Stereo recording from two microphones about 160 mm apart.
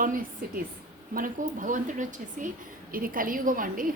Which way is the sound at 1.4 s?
55° right (ahead or behind).